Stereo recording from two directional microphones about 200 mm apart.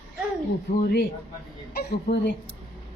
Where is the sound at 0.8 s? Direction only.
50° left (ahead or behind).